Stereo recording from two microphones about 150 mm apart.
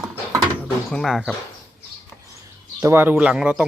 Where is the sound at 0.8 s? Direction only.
Centre (ahead or behind).